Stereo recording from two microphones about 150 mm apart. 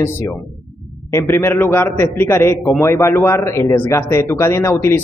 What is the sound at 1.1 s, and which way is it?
Speech, 15° left (ahead or behind).